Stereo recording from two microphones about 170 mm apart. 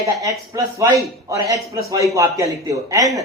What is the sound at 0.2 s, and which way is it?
A man's voice, 20° right (ahead or behind).